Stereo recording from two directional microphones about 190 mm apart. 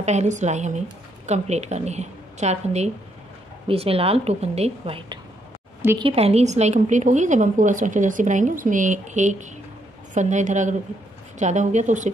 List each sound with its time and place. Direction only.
0.0 s a woman's voice: 35° right (ahead or behind)